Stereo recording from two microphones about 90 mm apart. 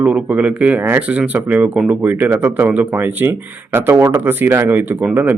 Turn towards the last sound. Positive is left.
turn(degrees=-25)  # may be behind; listen again after turning